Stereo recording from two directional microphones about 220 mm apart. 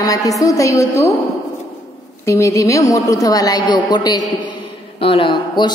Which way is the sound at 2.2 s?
15° left (ahead or behind).